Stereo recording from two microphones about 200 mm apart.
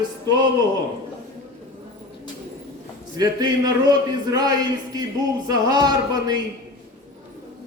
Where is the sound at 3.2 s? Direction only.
20° right (ahead or behind).